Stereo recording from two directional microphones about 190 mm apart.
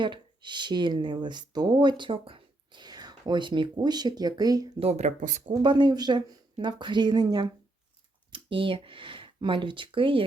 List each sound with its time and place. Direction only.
0.0 s speech: 25° right (ahead or behind)
4.8 s speech: 35° right (ahead or behind)
5.5 s speech: 25° right (ahead or behind)